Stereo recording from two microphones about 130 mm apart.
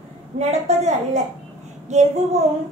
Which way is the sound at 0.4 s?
55° right (ahead or behind).